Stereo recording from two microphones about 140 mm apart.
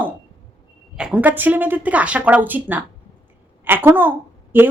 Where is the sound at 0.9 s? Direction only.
10° right (ahead or behind).